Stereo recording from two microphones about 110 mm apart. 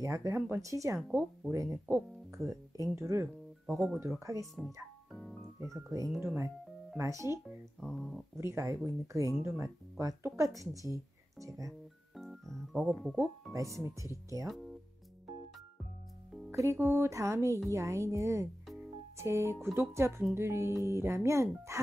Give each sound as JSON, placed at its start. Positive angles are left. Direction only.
{"t": 0.0, "sound": "speech", "side_deg": -30}
{"t": 3.6, "sound": "speech", "side_deg": 0}
{"t": 4.2, "sound": "speech", "side_deg": -30}
{"t": 5.6, "sound": "speech", "side_deg": -30}
{"t": 7.4, "sound": "speech", "side_deg": 5}
{"t": 8.4, "sound": "speech", "side_deg": -25}
{"t": 12.2, "sound": "speech", "side_deg": 0}
{"t": 13.1, "sound": "speech", "side_deg": -25}
{"t": 14.5, "sound": "speech", "side_deg": 0}
{"t": 16.5, "sound": "speech", "side_deg": -25}